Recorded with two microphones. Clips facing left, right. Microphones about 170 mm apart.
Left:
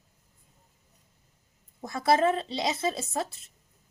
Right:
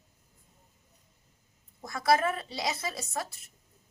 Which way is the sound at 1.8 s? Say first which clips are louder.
Left 3 dB; 25° left (ahead or behind).